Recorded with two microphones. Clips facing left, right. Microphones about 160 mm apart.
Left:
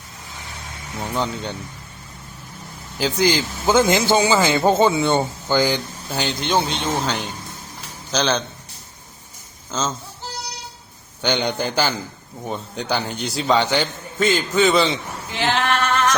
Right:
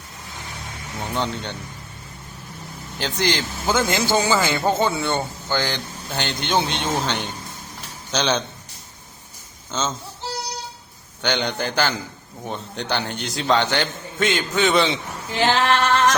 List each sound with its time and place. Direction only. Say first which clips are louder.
0.9 s a man's voice: left 1 dB; centre (ahead or behind)
3.0 s a man's voice: left 4 dB; 5° left (ahead or behind)
3.7 s a man's voice: left 4 dB; 20° left (ahead or behind); by 8.4 s centre (ahead or behind)
9.7 s a man's voice: left 1 dB; centre (ahead or behind)
11.2 s a man's voice: left 2 dB; 10° left (ahead or behind)
15.4 s singing: right 2 dB; 35° right (ahead or behind)